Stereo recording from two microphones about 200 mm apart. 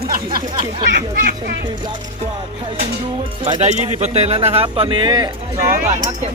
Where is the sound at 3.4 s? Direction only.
30° right (ahead or behind).